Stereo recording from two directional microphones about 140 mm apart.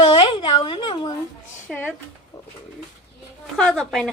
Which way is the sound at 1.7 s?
Centre (ahead or behind).